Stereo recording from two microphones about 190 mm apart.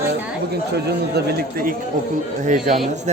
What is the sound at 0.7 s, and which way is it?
Speech, 60° right (ahead or behind).